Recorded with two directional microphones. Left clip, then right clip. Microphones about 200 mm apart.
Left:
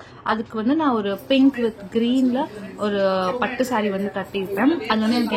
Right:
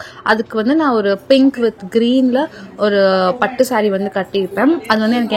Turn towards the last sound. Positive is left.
turn(degrees=-30)  # may be behind; listen again after turning